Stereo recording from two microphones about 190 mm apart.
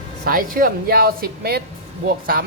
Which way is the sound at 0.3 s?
50° right (ahead or behind).